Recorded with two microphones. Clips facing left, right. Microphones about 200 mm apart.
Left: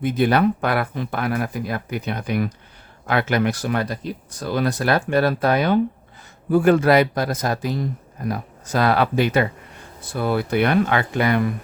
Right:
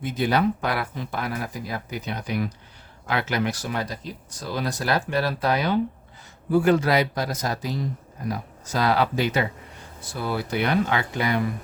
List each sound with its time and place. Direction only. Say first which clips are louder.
0.0 s speech: left 5 dB; 60° left (ahead or behind)